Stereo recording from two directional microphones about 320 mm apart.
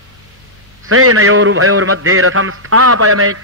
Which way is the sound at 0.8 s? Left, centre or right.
Right.